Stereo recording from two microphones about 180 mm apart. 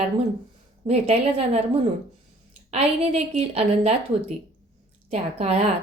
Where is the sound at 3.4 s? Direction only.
35° right (ahead or behind).